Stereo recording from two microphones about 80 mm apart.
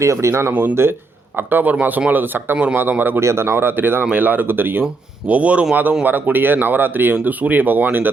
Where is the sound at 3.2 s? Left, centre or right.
Right.